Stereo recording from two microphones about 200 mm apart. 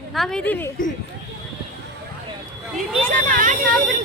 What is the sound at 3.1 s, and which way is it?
Speech, 40° right (ahead or behind).